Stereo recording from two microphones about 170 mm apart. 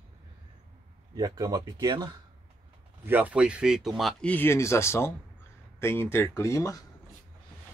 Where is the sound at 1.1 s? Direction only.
25° right (ahead or behind).